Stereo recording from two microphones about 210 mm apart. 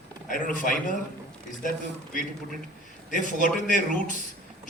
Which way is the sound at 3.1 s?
40° left (ahead or behind).